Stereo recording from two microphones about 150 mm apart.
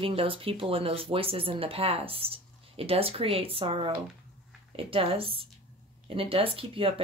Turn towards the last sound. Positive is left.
turn(degrees=-40)  # may be behind; listen again after turning